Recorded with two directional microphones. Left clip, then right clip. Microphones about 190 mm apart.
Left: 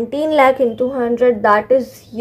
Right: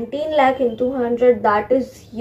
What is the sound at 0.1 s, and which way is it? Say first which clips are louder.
A woman's voice: left 4 dB; 50° left (ahead or behind).